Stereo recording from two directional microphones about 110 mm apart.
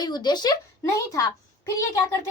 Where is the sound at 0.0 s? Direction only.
40° left (ahead or behind).